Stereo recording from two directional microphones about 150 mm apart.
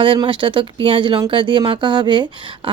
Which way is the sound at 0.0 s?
35° right (ahead or behind).